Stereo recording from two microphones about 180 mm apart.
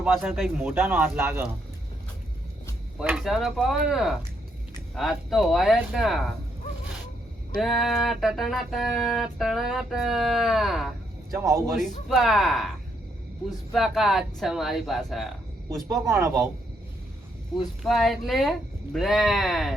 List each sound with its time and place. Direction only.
0.0 s music: centre (ahead or behind)
0.6 s speech: 10° right (ahead or behind)
3.0 s music: 5° right (ahead or behind)
7.6 s music: centre (ahead or behind)
11.3 s speech: 15° right (ahead or behind)
11.7 s music: centre (ahead or behind)
13.7 s music: centre (ahead or behind)
16.0 s speech: 10° right (ahead or behind)
17.8 s music: centre (ahead or behind)